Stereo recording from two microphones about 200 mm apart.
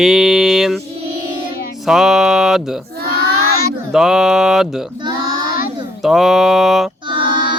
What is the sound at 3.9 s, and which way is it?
Mantra, centre (ahead or behind).